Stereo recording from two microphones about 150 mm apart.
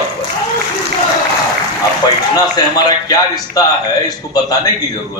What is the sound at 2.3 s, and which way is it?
A man's voice, 25° left (ahead or behind).